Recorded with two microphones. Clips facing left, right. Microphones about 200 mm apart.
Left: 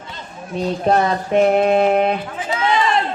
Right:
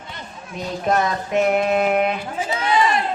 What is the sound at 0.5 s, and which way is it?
Speech, 35° left (ahead or behind).